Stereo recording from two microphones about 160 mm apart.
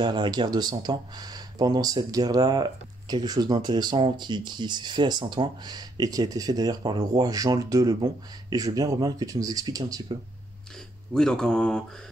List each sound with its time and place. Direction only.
0.0 s speech: 30° right (ahead or behind)
11.1 s speech: 5° left (ahead or behind)